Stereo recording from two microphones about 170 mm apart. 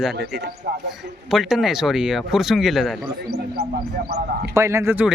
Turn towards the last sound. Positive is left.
turn(degrees=-10)  # may be behind; listen again after turning